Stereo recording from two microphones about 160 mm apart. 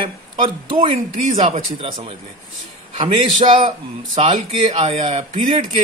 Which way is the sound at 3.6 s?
45° right (ahead or behind).